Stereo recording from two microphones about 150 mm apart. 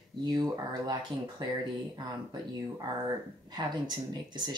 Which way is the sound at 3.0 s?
30° right (ahead or behind).